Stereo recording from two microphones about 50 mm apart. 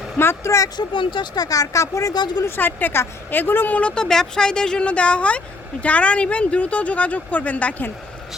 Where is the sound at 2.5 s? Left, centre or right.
Left.